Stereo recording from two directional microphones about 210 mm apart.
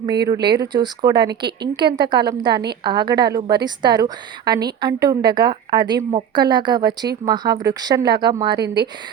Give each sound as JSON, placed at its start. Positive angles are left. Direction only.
{"t": 0.5, "sound": "a woman's voice", "side_deg": -20}
{"t": 8.5, "sound": "speech", "side_deg": -50}